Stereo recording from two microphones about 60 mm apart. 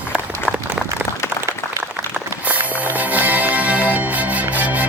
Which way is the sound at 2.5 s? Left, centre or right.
Right.